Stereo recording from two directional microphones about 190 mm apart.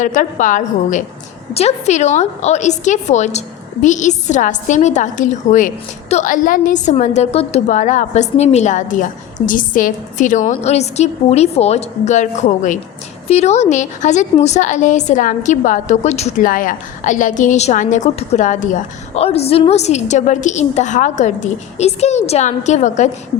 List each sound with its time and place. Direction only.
0.0 s a woman's voice: 40° left (ahead or behind)